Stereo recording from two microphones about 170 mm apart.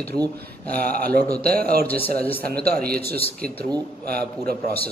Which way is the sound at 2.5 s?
65° right (ahead or behind).